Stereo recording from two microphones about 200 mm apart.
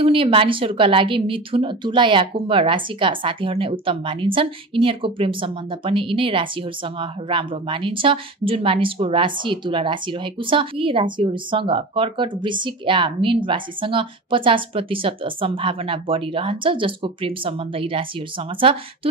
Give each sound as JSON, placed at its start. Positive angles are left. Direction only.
{"t": 0.0, "sound": "a woman's voice", "side_deg": -25}